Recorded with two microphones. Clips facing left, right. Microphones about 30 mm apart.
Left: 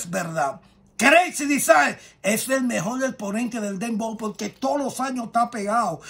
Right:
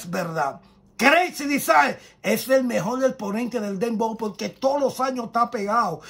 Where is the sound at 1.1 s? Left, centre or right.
Left.